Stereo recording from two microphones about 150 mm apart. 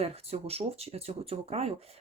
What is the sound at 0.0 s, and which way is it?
Speech, 45° right (ahead or behind).